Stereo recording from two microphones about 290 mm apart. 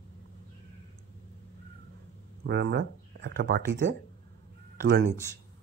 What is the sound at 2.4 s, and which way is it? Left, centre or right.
Speech, right.